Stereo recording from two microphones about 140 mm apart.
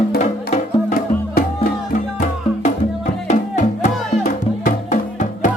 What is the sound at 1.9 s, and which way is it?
Music, 60° left (ahead or behind).